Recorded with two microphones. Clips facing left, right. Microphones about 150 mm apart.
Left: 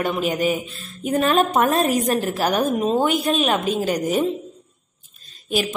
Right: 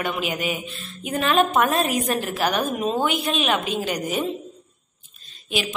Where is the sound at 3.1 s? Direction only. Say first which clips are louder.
Left 3 dB; 45° left (ahead or behind).